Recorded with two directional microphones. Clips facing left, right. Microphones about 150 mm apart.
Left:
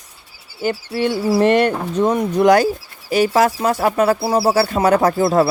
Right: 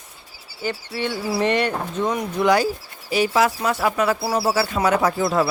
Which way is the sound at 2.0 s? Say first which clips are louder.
Left 7 dB; 30° left (ahead or behind).